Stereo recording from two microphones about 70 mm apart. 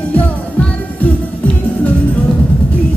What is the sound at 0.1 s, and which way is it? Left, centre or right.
Music, left.